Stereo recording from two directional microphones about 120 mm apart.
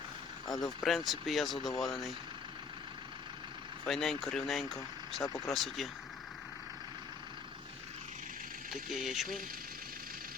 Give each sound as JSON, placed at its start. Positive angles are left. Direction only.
{"t": 0.8, "sound": "speech", "side_deg": 0}
{"t": 3.8, "sound": "speech", "side_deg": 0}
{"t": 5.2, "sound": "speech", "side_deg": 30}
{"t": 5.5, "sound": "speech", "side_deg": 0}
{"t": 8.7, "sound": "speech", "side_deg": 0}